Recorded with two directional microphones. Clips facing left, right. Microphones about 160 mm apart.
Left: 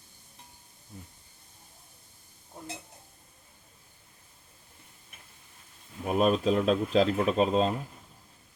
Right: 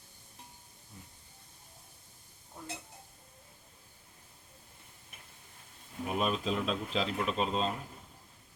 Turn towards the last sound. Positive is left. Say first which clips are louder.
# left 7 dB
turn(degrees=45)  # may be behind; listen again after turning